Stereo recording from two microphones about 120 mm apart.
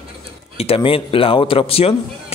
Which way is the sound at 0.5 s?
50° left (ahead or behind).